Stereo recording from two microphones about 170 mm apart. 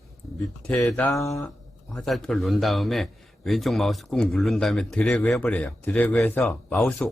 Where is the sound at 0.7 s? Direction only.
5° left (ahead or behind).